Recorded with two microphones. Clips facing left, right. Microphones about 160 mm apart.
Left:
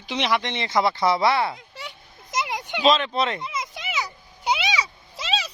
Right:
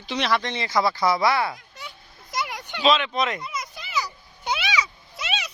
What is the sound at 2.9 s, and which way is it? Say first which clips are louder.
Speech: left 1 dB; 35° left (ahead or behind).